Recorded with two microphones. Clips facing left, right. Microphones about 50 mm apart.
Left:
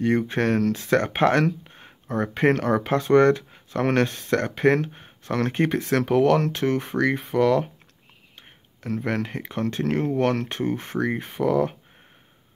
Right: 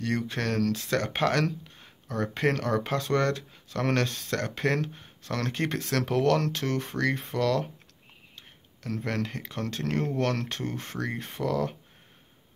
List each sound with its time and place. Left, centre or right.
0.0 s speech: left